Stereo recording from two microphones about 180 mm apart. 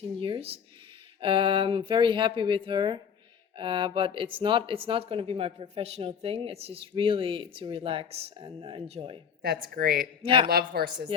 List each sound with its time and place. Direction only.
0.2 s speech: 30° right (ahead or behind)
9.4 s a woman's voice: 55° right (ahead or behind)
10.2 s speech: 30° right (ahead or behind)
10.5 s a woman's voice: 55° right (ahead or behind)